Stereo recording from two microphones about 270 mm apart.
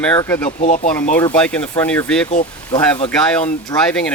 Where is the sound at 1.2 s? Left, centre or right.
Centre.